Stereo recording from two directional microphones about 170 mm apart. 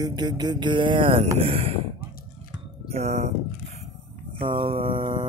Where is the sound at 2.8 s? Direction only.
40° right (ahead or behind).